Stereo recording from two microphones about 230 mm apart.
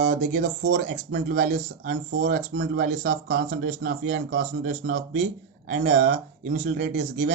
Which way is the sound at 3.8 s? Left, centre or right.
Right.